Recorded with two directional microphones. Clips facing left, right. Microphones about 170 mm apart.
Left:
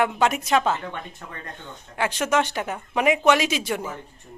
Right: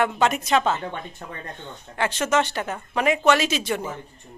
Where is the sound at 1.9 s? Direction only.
10° left (ahead or behind).